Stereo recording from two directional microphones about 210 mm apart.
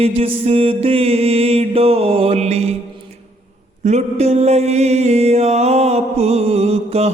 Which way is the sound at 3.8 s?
30° right (ahead or behind).